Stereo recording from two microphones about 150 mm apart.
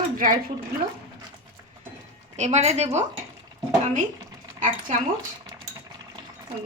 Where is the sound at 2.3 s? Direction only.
50° right (ahead or behind).